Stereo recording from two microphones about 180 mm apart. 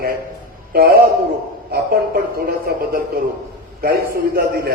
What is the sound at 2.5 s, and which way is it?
Speech, 55° right (ahead or behind).